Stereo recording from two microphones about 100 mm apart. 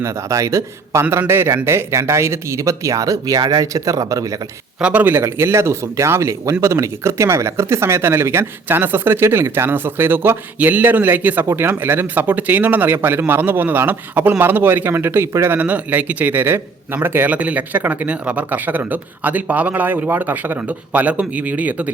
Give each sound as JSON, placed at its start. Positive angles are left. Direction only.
{"t": 0.0, "sound": "speech", "side_deg": -30}
{"t": 4.8, "sound": "a man's voice", "side_deg": -15}